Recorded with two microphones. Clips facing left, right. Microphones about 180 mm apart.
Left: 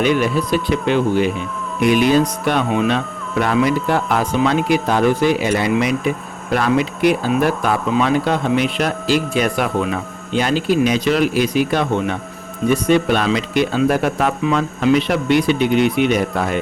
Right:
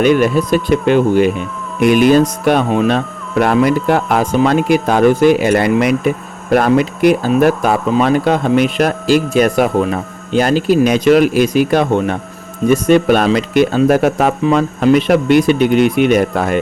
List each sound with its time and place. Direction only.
0.0 s speech: 50° right (ahead or behind)